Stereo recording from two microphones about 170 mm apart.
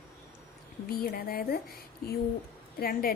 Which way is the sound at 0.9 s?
60° left (ahead or behind).